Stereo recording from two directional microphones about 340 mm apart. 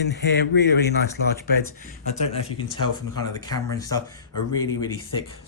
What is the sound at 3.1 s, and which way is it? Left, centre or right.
Speech, centre.